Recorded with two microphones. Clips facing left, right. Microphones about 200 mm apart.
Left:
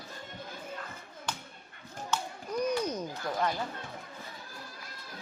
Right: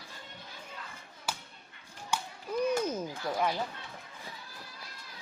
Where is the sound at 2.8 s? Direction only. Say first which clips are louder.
Right 1 dB; 5° right (ahead or behind).